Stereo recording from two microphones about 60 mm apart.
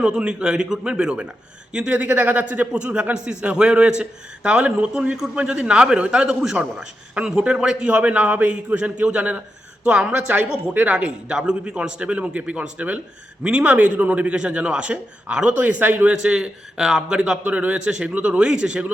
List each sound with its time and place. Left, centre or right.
0.0 s a man's voice: centre
5.1 s a man's voice: centre
5.4 s a man's voice: centre
17.4 s a man's voice: right